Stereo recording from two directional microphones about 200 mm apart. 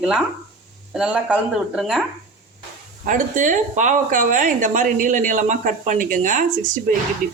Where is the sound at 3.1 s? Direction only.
40° right (ahead or behind).